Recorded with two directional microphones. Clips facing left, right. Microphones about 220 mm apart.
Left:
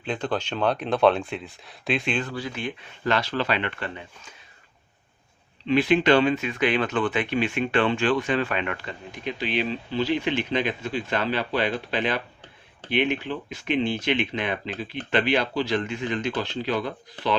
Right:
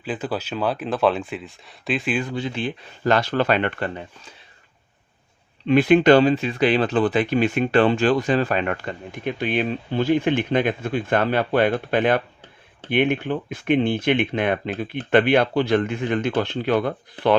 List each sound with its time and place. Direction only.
0.0 s speech: 5° right (ahead or behind)
2.3 s speech: 25° right (ahead or behind); by 4.4 s 45° right (ahead or behind)
5.6 s speech: 50° right (ahead or behind)